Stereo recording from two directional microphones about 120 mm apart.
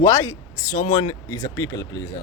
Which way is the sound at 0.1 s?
25° left (ahead or behind).